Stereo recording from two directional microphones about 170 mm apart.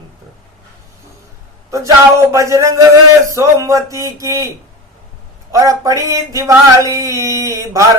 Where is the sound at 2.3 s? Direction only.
15° right (ahead or behind).